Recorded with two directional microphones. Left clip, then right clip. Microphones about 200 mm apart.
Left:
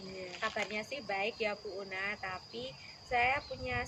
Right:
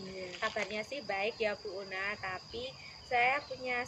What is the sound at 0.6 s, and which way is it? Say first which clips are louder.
Cricket: right 1 dB; 15° right (ahead or behind).